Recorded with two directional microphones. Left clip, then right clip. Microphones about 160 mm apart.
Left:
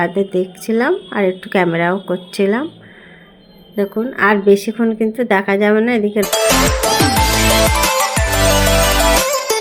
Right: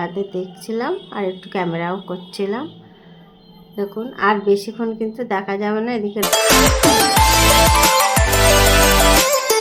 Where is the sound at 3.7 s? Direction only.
25° left (ahead or behind).